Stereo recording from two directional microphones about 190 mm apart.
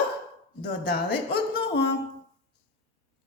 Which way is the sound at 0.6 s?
55° left (ahead or behind).